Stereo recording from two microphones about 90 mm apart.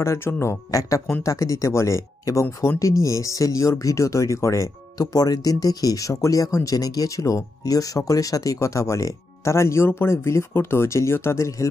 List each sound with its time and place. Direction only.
0.0 s speech: 30° left (ahead or behind)
5.0 s speech: 45° left (ahead or behind)